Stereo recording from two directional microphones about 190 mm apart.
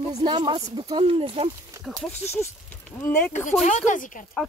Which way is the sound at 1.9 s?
5° right (ahead or behind).